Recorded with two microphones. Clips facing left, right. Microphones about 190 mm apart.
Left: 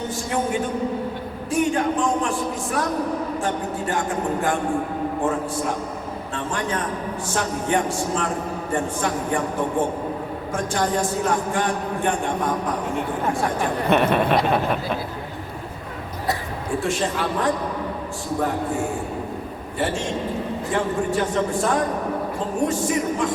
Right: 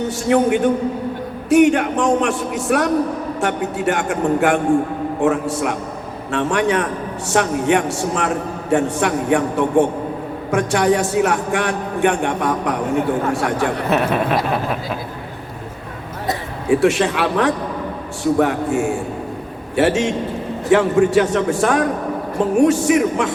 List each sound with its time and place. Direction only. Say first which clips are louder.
0.1 s a man's voice: right 10 dB; 70° right (ahead or behind)
13.9 s a sound: left 2 dB; 5° right (ahead or behind)
16.6 s a man's voice: right 9 dB; 75° right (ahead or behind)